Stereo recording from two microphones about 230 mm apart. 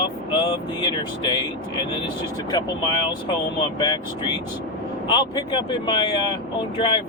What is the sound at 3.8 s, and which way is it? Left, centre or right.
Speech, centre.